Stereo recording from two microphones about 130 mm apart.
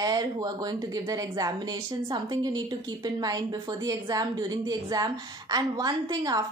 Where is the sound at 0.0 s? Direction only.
30° right (ahead or behind).